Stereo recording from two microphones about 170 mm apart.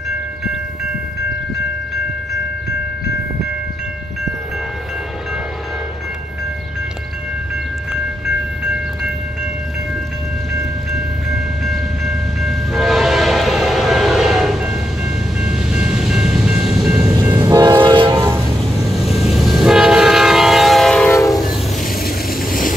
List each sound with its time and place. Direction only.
10.6 s train: centre (ahead or behind)
17.2 s train: 15° right (ahead or behind)
18.0 s train: 15° right (ahead or behind)
19.0 s train: centre (ahead or behind)
21.8 s vehicle: 60° left (ahead or behind)